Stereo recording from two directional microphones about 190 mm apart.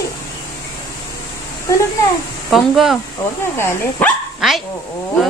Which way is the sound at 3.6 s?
10° left (ahead or behind).